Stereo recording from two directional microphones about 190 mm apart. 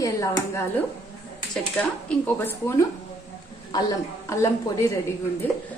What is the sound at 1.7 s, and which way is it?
A woman's voice, 10° left (ahead or behind).